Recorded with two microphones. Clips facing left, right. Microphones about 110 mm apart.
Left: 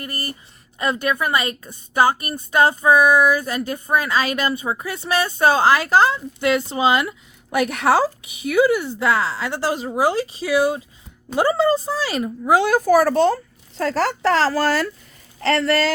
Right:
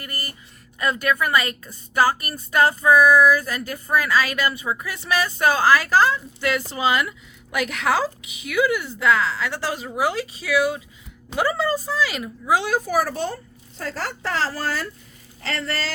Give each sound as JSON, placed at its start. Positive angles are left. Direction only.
{"t": 0.0, "sound": "a woman's voice", "side_deg": 25}
{"t": 12.5, "sound": "speech", "side_deg": 55}
{"t": 12.8, "sound": "speech", "side_deg": 80}
{"t": 15.4, "sound": "speech", "side_deg": 70}